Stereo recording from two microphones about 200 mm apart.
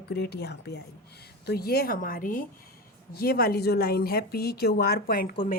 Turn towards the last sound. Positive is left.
turn(degrees=45)  # may be behind; listen again after turning